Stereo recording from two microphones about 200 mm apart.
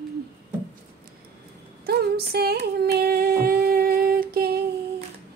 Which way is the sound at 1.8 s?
50° right (ahead or behind).